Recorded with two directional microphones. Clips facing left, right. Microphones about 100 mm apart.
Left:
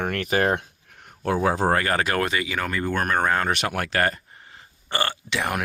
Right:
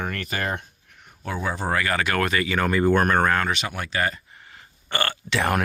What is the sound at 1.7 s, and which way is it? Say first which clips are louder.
Speech: left 2 dB; 40° left (ahead or behind).